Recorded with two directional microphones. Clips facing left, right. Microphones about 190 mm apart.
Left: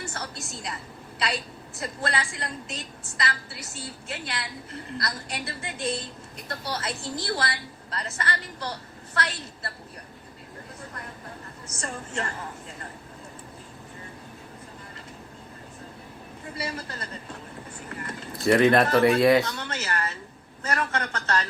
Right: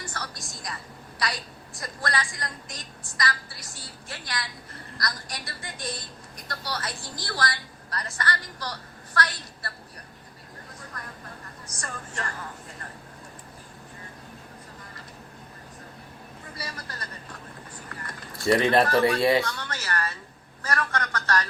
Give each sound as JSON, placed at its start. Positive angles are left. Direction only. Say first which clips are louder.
{"t": 0.1, "sound": "music", "louder": "left 2 dB", "side_deg": 25}
{"t": 1.8, "sound": "a woman's voice", "louder": "left 1 dB", "side_deg": 25}
{"t": 11.8, "sound": "a woman's voice", "louder": "left 4 dB", "side_deg": 25}
{"t": 16.6, "sound": "a woman's voice", "louder": "left 6 dB", "side_deg": 25}
{"t": 18.0, "sound": "a sound", "louder": "left 2 dB", "side_deg": 25}
{"t": 18.9, "sound": "a woman's voice", "louder": "left 3 dB", "side_deg": 25}